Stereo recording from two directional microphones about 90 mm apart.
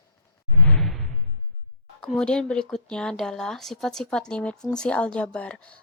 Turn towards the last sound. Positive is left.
turn(degrees=10)  # may be behind; listen again after turning